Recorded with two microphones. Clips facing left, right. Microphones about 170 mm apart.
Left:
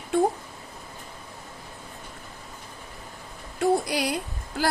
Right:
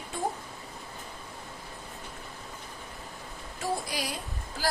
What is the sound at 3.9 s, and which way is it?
Speech, 70° left (ahead or behind).